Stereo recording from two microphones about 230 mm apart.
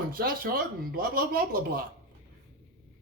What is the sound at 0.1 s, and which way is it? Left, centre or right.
Speech, right.